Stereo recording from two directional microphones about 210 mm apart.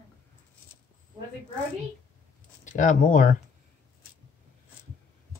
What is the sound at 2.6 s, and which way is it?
Speech, 35° left (ahead or behind).